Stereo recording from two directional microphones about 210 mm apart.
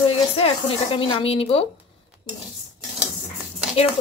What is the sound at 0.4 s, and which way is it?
Speech, 25° left (ahead or behind).